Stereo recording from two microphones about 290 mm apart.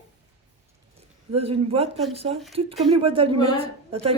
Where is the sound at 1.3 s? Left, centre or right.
Centre.